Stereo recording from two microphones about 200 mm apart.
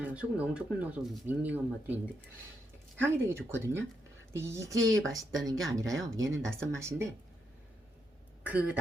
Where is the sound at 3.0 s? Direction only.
10° right (ahead or behind).